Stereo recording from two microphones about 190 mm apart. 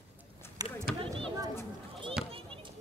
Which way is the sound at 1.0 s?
25° right (ahead or behind).